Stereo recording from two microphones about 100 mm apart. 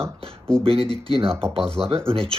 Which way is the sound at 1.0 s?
70° right (ahead or behind).